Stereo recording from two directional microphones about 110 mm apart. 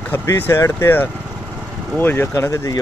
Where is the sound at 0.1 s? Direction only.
25° left (ahead or behind).